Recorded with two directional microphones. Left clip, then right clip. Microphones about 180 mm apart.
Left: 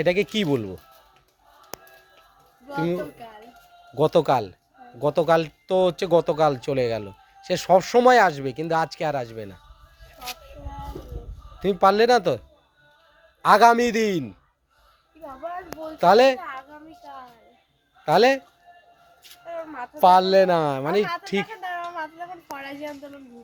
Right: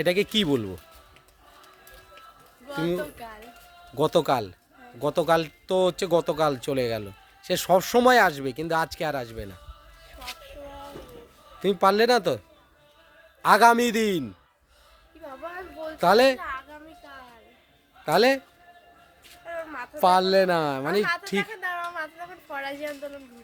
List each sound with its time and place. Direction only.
0.0 s speech: 15° right (ahead or behind)
2.6 s speech: 15° right (ahead or behind)
11.6 s speech: 15° right (ahead or behind)
13.4 s speech: 10° right (ahead or behind)
15.9 s speech: 10° right (ahead or behind)
18.0 s a man's voice: 10° right (ahead or behind)
19.5 s speech: 15° right (ahead or behind)